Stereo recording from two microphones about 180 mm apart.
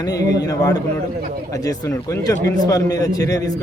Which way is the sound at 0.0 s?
20° left (ahead or behind).